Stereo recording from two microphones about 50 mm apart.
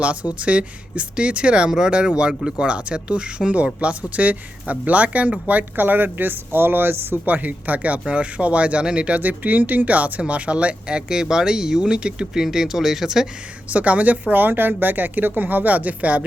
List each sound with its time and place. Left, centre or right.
0.0 s speech: right; by 13.2 s centre
13.7 s speech: right